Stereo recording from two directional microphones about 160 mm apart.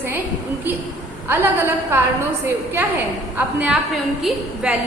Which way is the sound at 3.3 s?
10° right (ahead or behind).